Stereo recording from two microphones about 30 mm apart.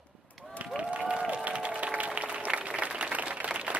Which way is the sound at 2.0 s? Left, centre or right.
Right.